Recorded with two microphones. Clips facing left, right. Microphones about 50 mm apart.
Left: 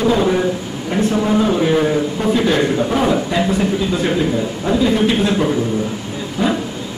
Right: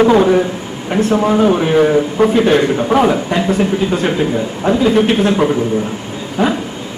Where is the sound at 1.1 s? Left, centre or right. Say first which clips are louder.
Right 5 dB; right.